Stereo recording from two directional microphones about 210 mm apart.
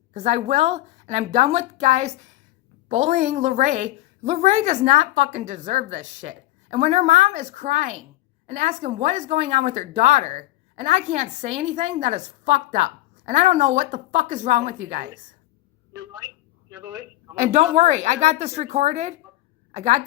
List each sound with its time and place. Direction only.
0.1 s a woman's voice: 35° right (ahead or behind)
16.7 s speech: 15° right (ahead or behind)
17.3 s a woman's voice: 35° right (ahead or behind)